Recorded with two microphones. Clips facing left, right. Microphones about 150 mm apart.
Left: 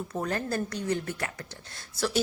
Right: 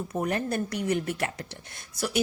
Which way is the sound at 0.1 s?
20° right (ahead or behind).